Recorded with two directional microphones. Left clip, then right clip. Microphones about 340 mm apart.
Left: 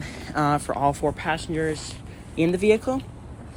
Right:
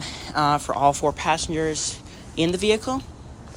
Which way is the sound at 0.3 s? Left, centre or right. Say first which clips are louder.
Right 2 dB; centre.